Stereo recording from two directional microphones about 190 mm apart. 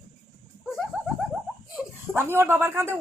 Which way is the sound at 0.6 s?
Centre (ahead or behind).